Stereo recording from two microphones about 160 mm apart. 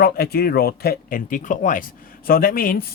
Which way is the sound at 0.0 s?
70° left (ahead or behind).